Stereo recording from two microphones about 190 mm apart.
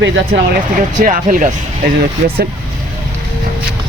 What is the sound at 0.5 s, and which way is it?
Speech, 45° right (ahead or behind).